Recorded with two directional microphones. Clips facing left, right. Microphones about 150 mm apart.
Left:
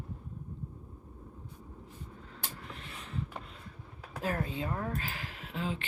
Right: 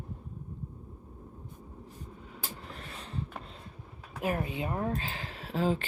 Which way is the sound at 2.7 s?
35° right (ahead or behind).